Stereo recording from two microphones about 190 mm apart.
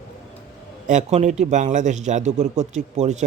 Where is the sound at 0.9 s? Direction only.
40° right (ahead or behind).